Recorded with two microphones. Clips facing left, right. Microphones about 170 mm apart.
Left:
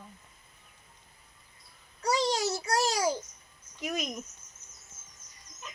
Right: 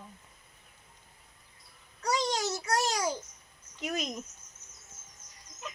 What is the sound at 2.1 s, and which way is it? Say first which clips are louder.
Child singing: left 2 dB; 30° left (ahead or behind).